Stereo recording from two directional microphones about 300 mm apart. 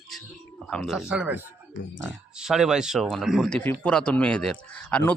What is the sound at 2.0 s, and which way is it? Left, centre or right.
Speech, centre.